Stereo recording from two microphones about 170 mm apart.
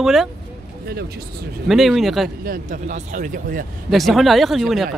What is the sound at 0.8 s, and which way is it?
Speech, 65° right (ahead or behind).